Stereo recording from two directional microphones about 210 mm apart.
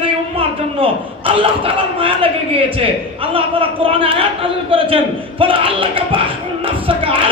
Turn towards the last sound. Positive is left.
turn(degrees=-25)  # may be behind; listen again after turning